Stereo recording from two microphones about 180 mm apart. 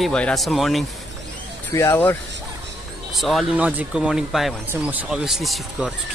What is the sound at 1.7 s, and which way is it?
Speech, 15° left (ahead or behind).